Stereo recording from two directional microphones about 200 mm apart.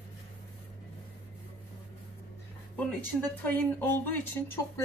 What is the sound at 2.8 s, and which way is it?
Speech, 10° left (ahead or behind).